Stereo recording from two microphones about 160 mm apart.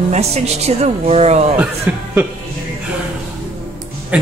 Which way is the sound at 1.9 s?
10° right (ahead or behind).